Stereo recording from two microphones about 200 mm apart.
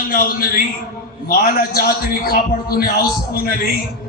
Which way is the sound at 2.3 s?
50° left (ahead or behind).